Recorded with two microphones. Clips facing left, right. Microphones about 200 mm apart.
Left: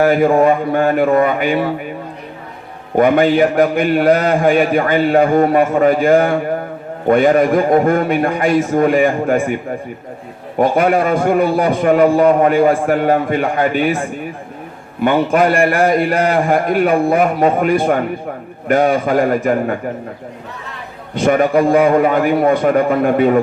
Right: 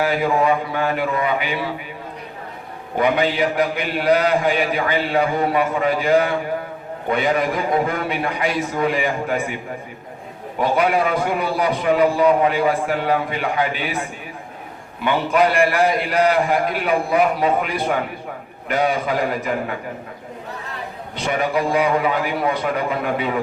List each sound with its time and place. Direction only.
0.0 s a man's voice: 50° left (ahead or behind)
2.9 s a man's voice: 50° left (ahead or behind)
10.6 s a man's voice: 50° left (ahead or behind)
15.0 s a man's voice: 50° left (ahead or behind)
21.2 s a man's voice: 50° left (ahead or behind)